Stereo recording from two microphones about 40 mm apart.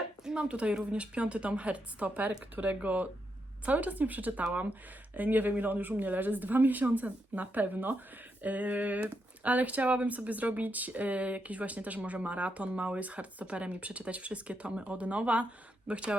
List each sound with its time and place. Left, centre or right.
0.3 s speech: right